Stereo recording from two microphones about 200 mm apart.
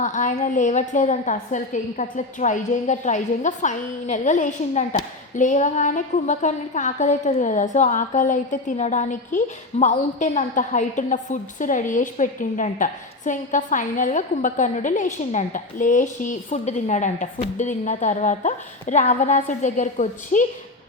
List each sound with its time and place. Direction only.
0.0 s a woman's voice: 40° left (ahead or behind)